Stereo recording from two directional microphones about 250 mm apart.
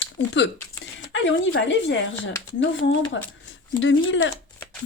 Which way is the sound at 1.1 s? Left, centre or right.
Left.